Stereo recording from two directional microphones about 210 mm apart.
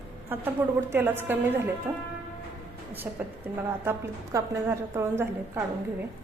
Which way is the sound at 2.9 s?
10° right (ahead or behind).